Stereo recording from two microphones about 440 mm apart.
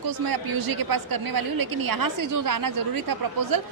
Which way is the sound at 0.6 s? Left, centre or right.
Right.